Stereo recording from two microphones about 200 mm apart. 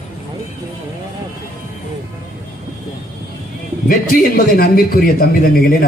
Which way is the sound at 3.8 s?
45° left (ahead or behind).